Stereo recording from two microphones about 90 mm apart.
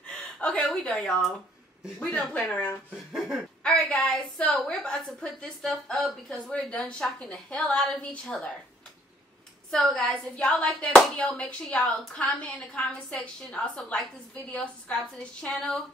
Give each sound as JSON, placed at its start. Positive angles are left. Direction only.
{"t": 0.0, "sound": "a sound", "side_deg": 10}
{"t": 0.7, "sound": "a woman's voice", "side_deg": 5}
{"t": 3.2, "sound": "speech", "side_deg": -5}
{"t": 3.6, "sound": "a woman's voice", "side_deg": 10}
{"t": 9.7, "sound": "a woman's voice", "side_deg": 5}